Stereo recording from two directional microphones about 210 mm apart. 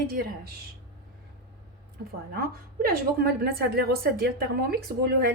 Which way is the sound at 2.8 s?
45° right (ahead or behind).